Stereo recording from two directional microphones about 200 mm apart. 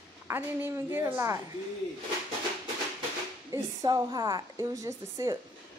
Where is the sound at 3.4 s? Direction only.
20° right (ahead or behind).